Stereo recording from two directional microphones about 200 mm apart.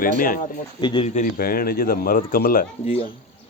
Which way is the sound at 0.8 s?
25° left (ahead or behind).